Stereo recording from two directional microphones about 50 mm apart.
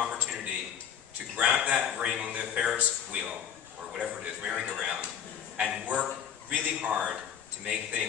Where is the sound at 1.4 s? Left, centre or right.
Right.